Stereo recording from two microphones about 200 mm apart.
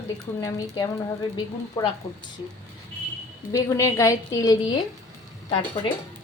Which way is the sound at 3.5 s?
15° left (ahead or behind).